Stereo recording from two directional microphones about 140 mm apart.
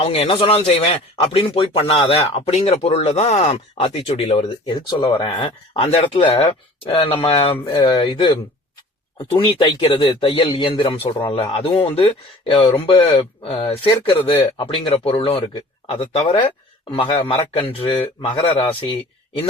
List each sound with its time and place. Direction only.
0.0 s speech: 45° left (ahead or behind)
4.7 s a man's voice: 30° left (ahead or behind)